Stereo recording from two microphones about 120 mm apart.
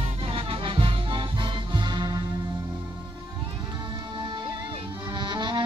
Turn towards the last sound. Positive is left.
turn(degrees=-40)  # may be behind; listen again after turning